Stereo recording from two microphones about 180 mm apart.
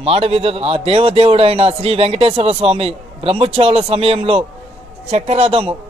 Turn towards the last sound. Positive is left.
turn(degrees=-30)  # may be behind; listen again after turning